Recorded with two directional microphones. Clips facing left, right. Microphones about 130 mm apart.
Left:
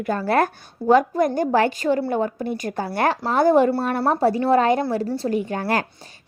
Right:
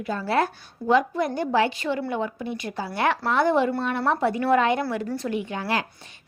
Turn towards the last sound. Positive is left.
turn(degrees=50)  # may be behind; listen again after turning